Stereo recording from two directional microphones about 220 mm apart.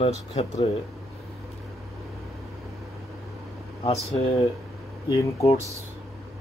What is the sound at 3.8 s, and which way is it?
Speech, 25° left (ahead or behind).